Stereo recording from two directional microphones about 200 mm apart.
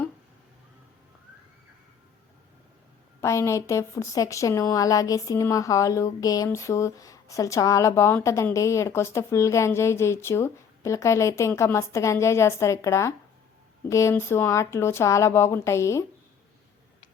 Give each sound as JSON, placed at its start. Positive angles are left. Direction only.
{"t": 3.2, "sound": "a woman's voice", "side_deg": 15}